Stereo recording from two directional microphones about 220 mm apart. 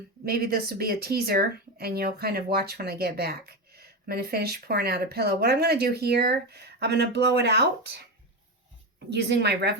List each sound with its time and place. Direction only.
0.3 s speech: 45° right (ahead or behind)
9.0 s speech: 50° right (ahead or behind)